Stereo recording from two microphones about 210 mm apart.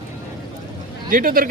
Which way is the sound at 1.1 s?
40° right (ahead or behind).